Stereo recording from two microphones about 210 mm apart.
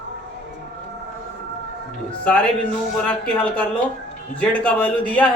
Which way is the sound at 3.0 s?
5° left (ahead or behind).